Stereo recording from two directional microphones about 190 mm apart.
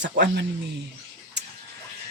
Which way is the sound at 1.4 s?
65° right (ahead or behind).